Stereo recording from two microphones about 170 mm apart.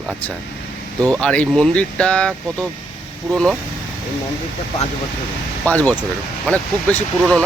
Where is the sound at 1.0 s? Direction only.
5° left (ahead or behind).